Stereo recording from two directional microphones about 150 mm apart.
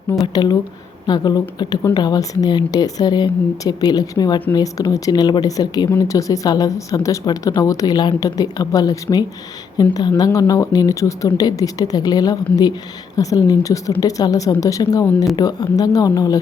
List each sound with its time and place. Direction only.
0.4 s a woman's voice: 30° left (ahead or behind)